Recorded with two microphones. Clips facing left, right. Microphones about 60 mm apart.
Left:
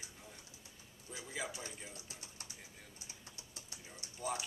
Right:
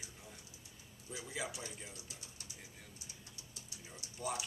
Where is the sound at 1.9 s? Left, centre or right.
Left.